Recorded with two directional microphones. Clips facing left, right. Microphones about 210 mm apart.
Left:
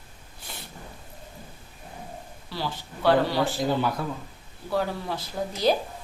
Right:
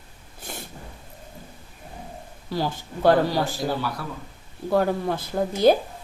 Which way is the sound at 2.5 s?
45° right (ahead or behind).